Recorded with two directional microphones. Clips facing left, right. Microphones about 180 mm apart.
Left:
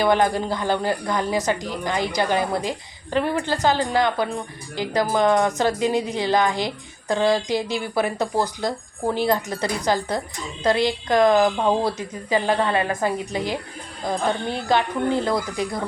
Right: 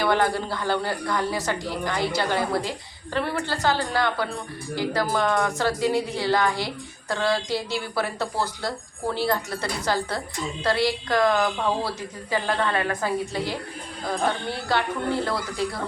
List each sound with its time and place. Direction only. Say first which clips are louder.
0.0 s a woman's voice: left 3 dB; 20° left (ahead or behind)